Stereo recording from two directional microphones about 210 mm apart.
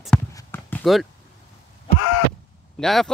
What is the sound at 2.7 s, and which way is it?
Speech, centre (ahead or behind).